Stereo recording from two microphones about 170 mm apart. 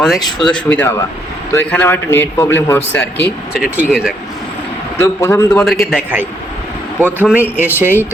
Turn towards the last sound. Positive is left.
turn(degrees=-10)  # may be behind; listen again after turning